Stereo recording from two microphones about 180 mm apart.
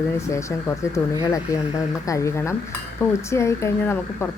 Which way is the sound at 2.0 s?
15° left (ahead or behind).